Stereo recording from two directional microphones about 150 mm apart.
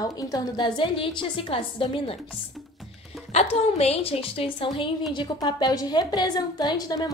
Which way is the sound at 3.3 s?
45° left (ahead or behind).